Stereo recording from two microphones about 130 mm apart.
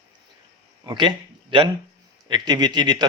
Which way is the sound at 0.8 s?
35° right (ahead or behind).